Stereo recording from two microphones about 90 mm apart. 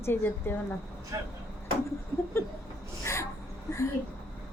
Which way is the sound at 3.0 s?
30° left (ahead or behind).